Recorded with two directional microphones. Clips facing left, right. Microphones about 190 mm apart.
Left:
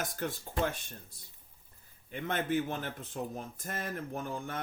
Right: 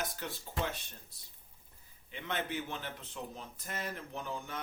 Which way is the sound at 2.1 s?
50° left (ahead or behind).